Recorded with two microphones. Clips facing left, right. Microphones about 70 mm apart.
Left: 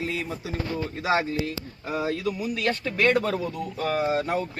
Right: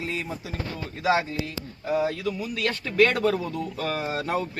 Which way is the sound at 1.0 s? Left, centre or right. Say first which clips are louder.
Right 1 dB; left.